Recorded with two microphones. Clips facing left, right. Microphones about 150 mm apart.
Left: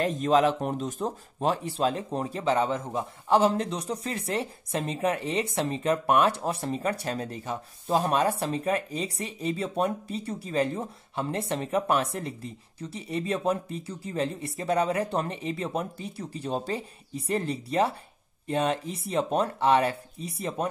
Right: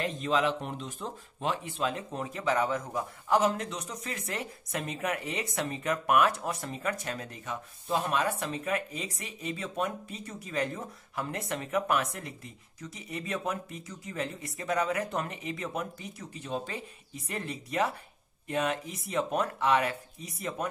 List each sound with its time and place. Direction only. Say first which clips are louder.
0.0 s speech: left 6 dB; 40° left (ahead or behind)